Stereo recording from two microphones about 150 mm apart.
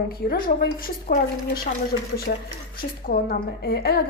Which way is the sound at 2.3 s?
75° left (ahead or behind).